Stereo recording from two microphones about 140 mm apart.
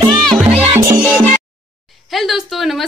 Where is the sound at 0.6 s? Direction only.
20° right (ahead or behind).